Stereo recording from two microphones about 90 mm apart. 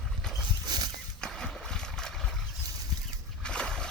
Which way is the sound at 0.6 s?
50° right (ahead or behind).